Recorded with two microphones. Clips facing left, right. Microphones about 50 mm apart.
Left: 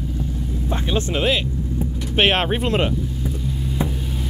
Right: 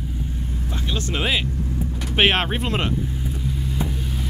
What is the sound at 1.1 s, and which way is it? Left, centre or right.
Speech, centre.